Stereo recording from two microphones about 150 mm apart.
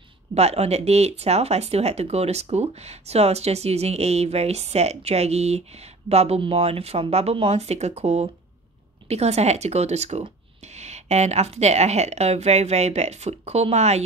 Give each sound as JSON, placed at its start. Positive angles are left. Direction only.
{"t": 0.3, "sound": "speech", "side_deg": -45}